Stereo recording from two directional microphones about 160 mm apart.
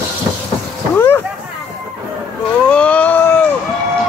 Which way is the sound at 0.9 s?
15° left (ahead or behind).